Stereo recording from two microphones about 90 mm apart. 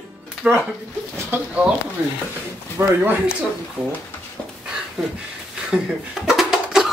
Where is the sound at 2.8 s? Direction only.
25° right (ahead or behind).